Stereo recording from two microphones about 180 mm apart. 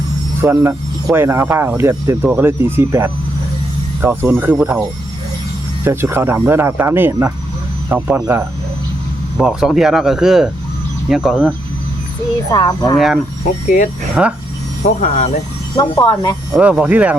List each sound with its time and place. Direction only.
0.4 s speech: 10° right (ahead or behind)
9.4 s speech: 5° right (ahead or behind)
12.5 s speech: 20° left (ahead or behind)
13.7 s speech: 45° left (ahead or behind)
14.2 s speech: 5° right (ahead or behind)
14.8 s speech: 45° left (ahead or behind)
15.7 s speech: 20° left (ahead or behind)
16.5 s speech: 5° right (ahead or behind)